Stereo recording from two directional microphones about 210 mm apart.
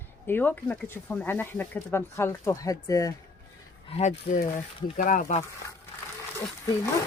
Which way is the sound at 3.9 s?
35° left (ahead or behind).